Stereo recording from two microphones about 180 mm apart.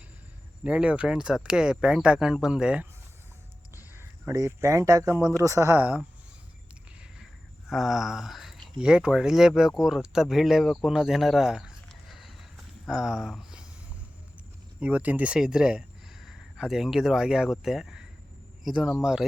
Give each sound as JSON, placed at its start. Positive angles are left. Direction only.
{"t": 0.6, "sound": "speech", "side_deg": -5}
{"t": 7.7, "sound": "speech", "side_deg": 0}
{"t": 14.8, "sound": "speech", "side_deg": -10}